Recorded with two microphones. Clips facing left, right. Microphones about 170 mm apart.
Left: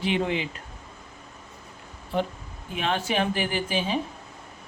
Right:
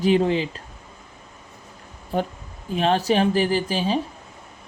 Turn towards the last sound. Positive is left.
turn(degrees=-35)  # may be behind; listen again after turning